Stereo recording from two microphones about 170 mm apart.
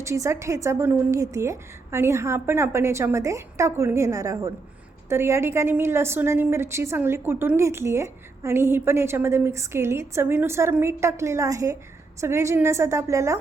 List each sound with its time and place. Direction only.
0.0 s a woman's voice: 15° right (ahead or behind)